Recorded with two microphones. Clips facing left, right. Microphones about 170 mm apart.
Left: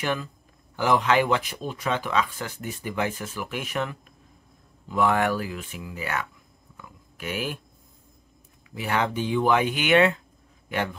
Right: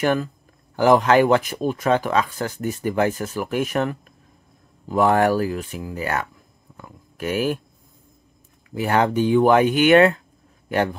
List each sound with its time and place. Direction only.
0.0 s speech: 50° right (ahead or behind)
6.8 s a sound: 45° right (ahead or behind)
8.7 s a man's voice: 45° right (ahead or behind)